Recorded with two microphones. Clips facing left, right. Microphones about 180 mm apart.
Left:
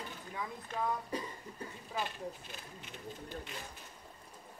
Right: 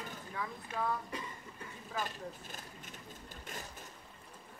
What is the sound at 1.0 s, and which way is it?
Cough, 35° left (ahead or behind).